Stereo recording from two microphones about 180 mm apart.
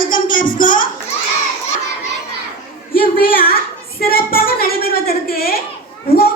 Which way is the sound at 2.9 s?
55° left (ahead or behind).